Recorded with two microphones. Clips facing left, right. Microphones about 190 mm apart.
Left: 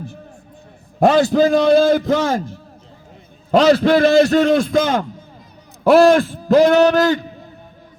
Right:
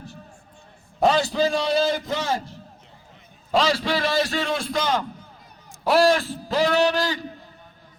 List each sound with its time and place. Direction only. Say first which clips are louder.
0.9 s a man's voice: left 7 dB; 50° left (ahead or behind)